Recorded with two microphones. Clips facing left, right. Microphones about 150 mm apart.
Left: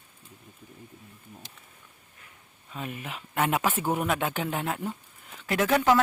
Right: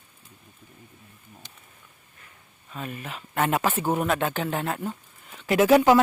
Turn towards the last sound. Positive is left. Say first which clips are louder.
# right 6 dB
turn(degrees=-10)  # may be behind; listen again after turning